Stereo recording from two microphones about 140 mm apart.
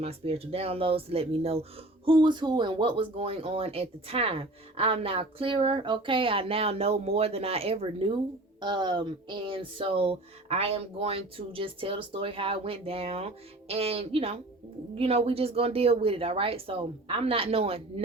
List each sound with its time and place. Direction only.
0.0 s speech: 45° right (ahead or behind)
2.0 s speech: 35° right (ahead or behind)
8.6 s speech: 35° right (ahead or behind)